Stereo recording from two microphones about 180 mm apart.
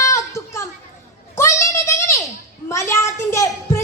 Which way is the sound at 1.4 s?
15° left (ahead or behind).